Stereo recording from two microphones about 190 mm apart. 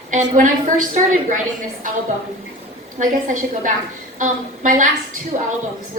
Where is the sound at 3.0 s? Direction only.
45° right (ahead or behind).